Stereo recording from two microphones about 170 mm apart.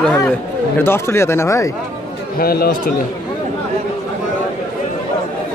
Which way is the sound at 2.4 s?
60° left (ahead or behind).